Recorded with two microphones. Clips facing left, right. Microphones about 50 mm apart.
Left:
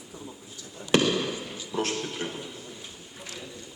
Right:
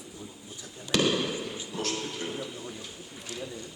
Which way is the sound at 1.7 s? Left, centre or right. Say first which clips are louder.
Left 5 dB; left.